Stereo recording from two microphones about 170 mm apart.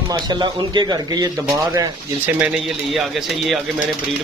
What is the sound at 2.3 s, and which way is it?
Speech, 5° right (ahead or behind).